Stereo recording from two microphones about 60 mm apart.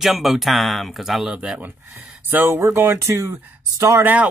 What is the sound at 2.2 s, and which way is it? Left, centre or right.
Speech, right.